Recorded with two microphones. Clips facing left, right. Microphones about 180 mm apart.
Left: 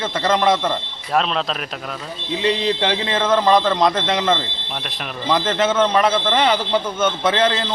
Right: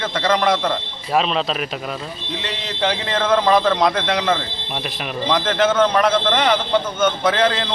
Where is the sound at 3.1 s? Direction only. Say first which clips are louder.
Even; 5° left (ahead or behind).